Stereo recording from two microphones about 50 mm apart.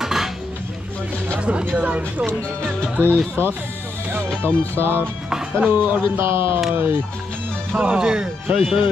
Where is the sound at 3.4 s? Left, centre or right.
Right.